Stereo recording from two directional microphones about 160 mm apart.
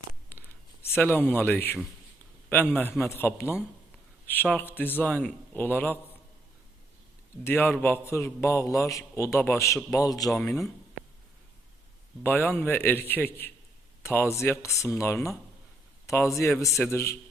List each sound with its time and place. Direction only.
0.3 s a sound: 15° left (ahead or behind)
2.5 s a man's voice: 10° left (ahead or behind)
7.4 s a man's voice: 10° left (ahead or behind)
10.2 s a man's voice: 10° left (ahead or behind)
12.2 s a man's voice: 10° left (ahead or behind)